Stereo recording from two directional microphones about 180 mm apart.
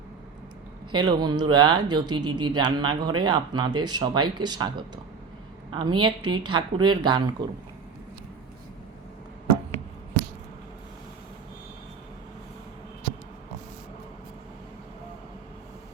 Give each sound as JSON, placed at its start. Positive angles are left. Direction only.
{"t": 0.9, "sound": "speech", "side_deg": -25}
{"t": 5.7, "sound": "speech", "side_deg": -25}